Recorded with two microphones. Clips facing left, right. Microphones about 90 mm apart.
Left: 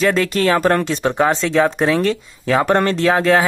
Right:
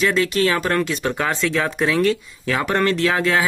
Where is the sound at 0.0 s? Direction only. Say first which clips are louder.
Left 2 dB; 40° left (ahead or behind).